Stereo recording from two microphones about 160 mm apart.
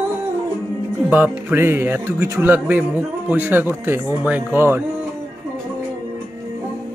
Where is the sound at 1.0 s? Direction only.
10° right (ahead or behind).